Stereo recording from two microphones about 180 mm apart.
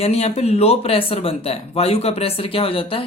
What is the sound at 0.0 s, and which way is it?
Speech, 35° left (ahead or behind).